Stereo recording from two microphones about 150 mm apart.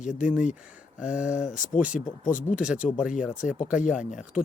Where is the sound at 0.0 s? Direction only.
60° left (ahead or behind).